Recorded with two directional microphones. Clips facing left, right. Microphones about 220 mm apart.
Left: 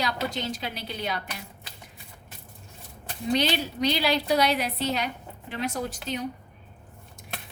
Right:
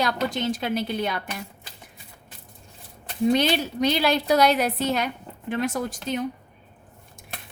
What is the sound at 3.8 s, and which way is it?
A woman's voice, 50° right (ahead or behind).